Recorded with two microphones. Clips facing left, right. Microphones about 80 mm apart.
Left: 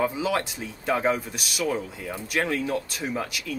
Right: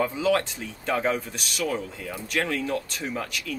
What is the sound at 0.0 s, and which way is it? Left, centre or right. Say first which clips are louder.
Speech: right 2 dB; centre.